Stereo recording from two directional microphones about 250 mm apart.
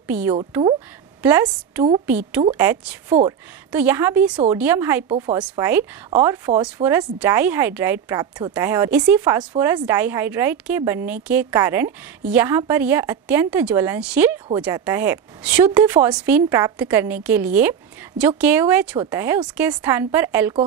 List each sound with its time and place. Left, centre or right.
0.0 s a woman's voice: centre